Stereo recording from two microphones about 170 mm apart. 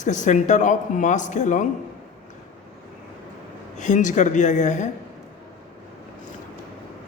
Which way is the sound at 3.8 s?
45° left (ahead or behind).